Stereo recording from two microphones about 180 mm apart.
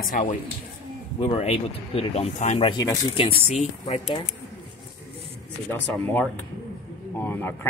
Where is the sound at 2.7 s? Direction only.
25° left (ahead or behind).